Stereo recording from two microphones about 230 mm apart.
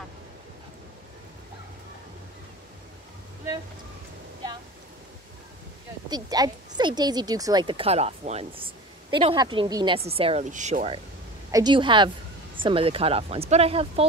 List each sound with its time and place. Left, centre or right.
6.0 s a woman's voice: centre